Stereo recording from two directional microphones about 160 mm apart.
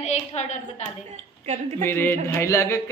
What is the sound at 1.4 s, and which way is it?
Speech, 45° right (ahead or behind).